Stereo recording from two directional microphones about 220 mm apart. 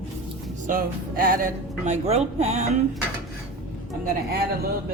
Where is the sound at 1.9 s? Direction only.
30° right (ahead or behind).